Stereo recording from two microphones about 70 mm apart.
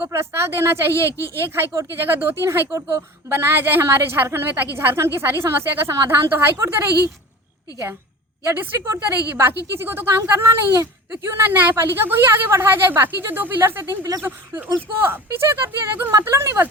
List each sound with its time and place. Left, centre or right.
0.1 s a woman's voice: right
1.1 s speech: left
1.4 s a woman's voice: right
8.4 s a woman's voice: right